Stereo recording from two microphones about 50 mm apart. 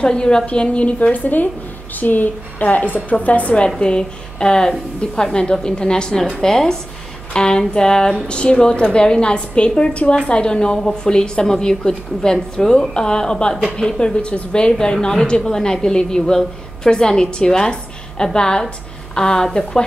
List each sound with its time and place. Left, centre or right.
0.0 s a woman's voice: centre